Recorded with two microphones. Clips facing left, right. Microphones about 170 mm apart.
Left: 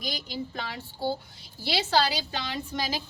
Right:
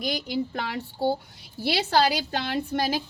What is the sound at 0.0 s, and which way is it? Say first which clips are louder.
A woman's voice: right 7 dB; 65° right (ahead or behind).